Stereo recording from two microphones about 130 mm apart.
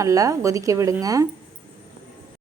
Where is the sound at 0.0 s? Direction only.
25° right (ahead or behind).